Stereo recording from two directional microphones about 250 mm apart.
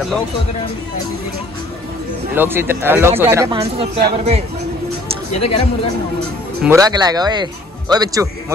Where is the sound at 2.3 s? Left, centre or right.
Centre.